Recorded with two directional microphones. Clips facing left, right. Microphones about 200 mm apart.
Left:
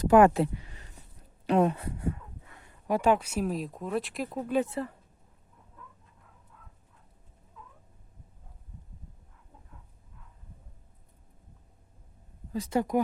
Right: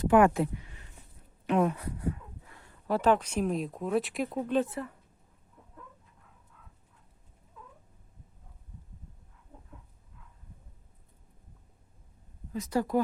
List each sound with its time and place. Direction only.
0.1 s speech: 35° left (ahead or behind)
2.6 s speech: 15° left (ahead or behind)
4.6 s a woman's voice: 25° left (ahead or behind)
12.5 s speech: 30° left (ahead or behind)